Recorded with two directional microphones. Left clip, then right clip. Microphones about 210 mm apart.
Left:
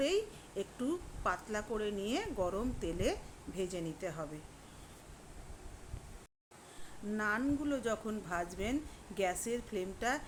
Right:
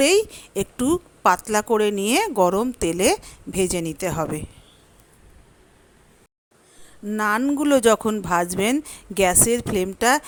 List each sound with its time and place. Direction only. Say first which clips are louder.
0.0 s a woman's voice: right 16 dB; 50° right (ahead or behind)
7.1 s a woman's voice: right 13 dB; 50° right (ahead or behind)